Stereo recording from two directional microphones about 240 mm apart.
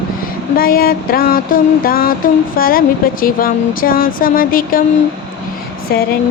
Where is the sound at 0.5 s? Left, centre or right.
Left.